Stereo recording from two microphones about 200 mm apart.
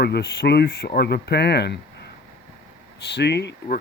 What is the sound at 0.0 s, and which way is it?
Speech, 55° left (ahead or behind).